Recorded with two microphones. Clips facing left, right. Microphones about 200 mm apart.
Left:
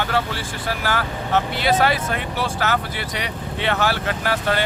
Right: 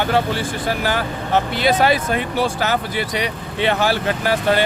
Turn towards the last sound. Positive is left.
turn(degrees=-15)  # may be behind; listen again after turning